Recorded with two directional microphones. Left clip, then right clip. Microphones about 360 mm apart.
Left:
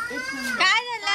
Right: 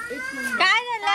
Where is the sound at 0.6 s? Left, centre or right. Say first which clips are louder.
Right 1 dB; centre.